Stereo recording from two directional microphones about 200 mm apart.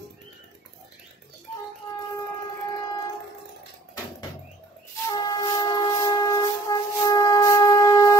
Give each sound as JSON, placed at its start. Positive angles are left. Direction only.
{"t": 5.1, "sound": "train", "side_deg": 20}